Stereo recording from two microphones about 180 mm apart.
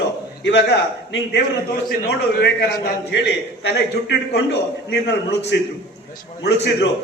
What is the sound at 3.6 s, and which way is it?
A man's voice, 75° left (ahead or behind).